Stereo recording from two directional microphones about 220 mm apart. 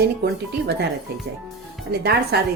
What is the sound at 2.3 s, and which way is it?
Speech, 50° right (ahead or behind).